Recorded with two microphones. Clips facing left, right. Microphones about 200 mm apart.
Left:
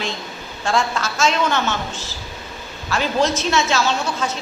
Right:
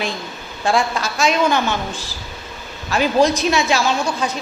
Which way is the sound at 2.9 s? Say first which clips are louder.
Right 4 dB; 15° right (ahead or behind).